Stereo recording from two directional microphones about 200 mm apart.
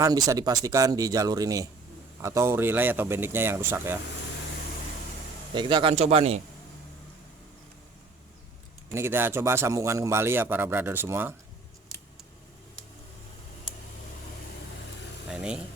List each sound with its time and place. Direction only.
0.0 s a man's voice: 15° right (ahead or behind)
5.5 s speech: 25° right (ahead or behind)
8.9 s a man's voice: 10° right (ahead or behind)
15.3 s speech: 5° right (ahead or behind)